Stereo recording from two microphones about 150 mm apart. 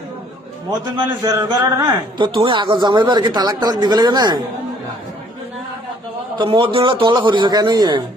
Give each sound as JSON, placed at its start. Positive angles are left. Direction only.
{"t": 0.9, "sound": "a man's voice", "side_deg": -25}
{"t": 6.4, "sound": "speech", "side_deg": -35}